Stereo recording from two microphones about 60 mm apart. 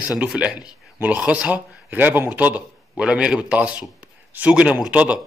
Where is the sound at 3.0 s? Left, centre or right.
Centre.